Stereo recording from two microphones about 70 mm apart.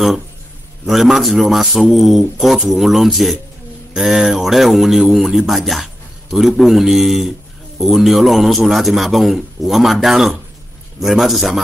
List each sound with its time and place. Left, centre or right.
0.8 s a man's voice: centre